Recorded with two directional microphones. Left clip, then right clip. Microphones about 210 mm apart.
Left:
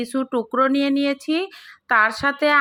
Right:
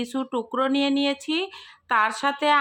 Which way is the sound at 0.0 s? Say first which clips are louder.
Left 4 dB; 15° left (ahead or behind).